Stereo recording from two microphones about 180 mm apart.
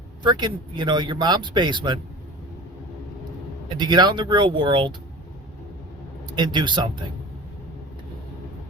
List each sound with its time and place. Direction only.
0.2 s speech: 25° right (ahead or behind)
3.8 s speech: 25° right (ahead or behind)
6.3 s speech: 25° right (ahead or behind)